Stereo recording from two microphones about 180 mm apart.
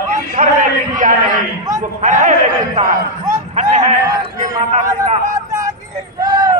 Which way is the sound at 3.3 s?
40° right (ahead or behind).